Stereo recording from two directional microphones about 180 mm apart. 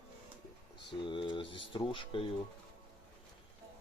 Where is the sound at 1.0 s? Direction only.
25° left (ahead or behind).